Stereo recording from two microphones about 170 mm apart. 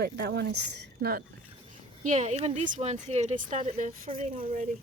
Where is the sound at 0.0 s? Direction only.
75° right (ahead or behind).